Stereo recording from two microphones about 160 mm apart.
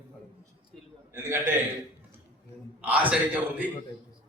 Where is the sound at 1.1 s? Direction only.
15° right (ahead or behind).